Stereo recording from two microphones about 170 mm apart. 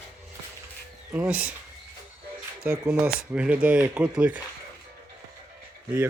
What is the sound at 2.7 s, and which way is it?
Speech, 5° right (ahead or behind).